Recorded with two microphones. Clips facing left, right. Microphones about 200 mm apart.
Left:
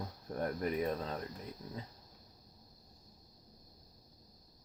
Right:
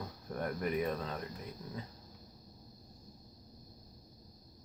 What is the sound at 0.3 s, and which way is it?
Speech, 30° left (ahead or behind).